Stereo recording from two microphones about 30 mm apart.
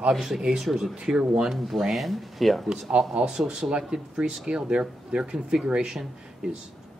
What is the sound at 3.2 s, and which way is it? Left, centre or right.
Speech, right.